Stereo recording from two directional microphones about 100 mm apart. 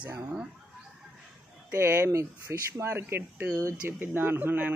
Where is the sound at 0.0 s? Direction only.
10° right (ahead or behind).